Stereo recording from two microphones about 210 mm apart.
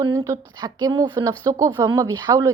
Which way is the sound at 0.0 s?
15° right (ahead or behind).